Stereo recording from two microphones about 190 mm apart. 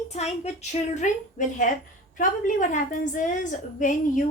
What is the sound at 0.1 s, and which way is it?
A woman's voice, 35° left (ahead or behind).